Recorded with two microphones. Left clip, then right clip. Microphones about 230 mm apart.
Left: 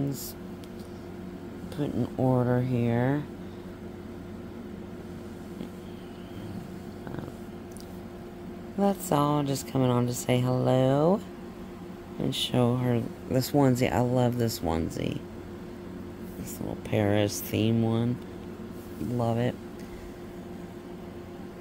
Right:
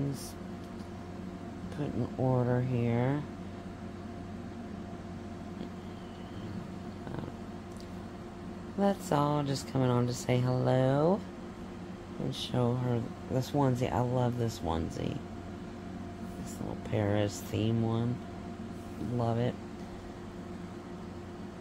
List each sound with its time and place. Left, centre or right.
1.8 s speech: left
8.7 s a woman's voice: centre
12.3 s speech: left
16.9 s speech: left
19.1 s a woman's voice: centre